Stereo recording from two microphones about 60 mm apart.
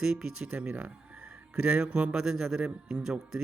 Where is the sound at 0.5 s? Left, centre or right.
Right; by 3.4 s centre.